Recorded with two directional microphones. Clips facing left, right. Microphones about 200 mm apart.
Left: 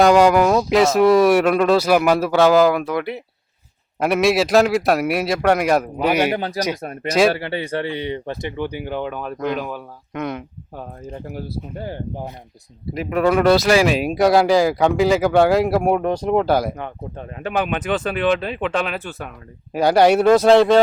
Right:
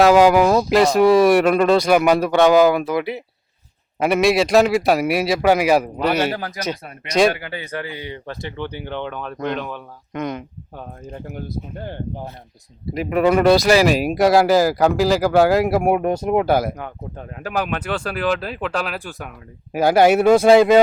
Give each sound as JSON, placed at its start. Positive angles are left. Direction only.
{"t": 0.0, "sound": "speech", "side_deg": 0}
{"t": 6.0, "sound": "speech", "side_deg": 10}
{"t": 6.4, "sound": "speech", "side_deg": 35}
{"t": 6.8, "sound": "speech", "side_deg": 45}
{"t": 7.1, "sound": "speech", "side_deg": 0}
{"t": 7.3, "sound": "speech", "side_deg": 30}
{"t": 12.9, "sound": "speech", "side_deg": 0}